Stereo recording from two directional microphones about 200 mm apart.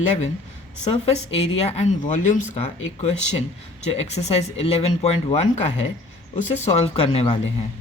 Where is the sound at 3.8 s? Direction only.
30° left (ahead or behind).